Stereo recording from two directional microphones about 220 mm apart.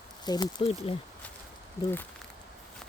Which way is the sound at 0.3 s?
20° left (ahead or behind).